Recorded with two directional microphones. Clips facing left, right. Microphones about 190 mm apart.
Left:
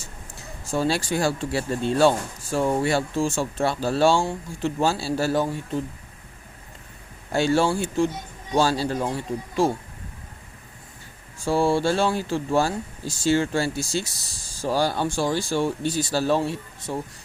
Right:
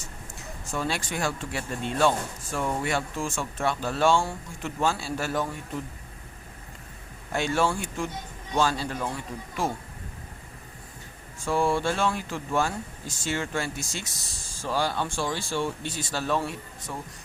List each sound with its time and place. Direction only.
0.7 s speech: 30° left (ahead or behind)
7.3 s speech: 30° left (ahead or behind)
11.4 s speech: 30° left (ahead or behind)